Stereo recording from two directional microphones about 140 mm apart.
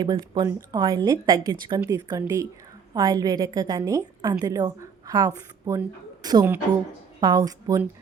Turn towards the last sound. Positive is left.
turn(degrees=-25)  # may be behind; listen again after turning